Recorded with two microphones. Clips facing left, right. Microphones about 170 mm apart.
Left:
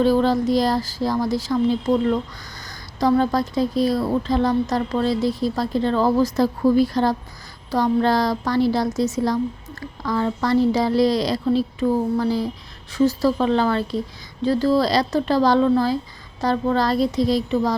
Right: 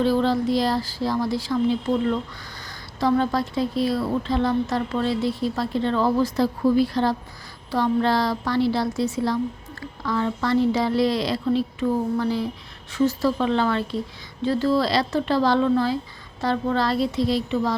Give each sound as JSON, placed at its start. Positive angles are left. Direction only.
{"t": 0.0, "sound": "a woman's voice", "side_deg": 45}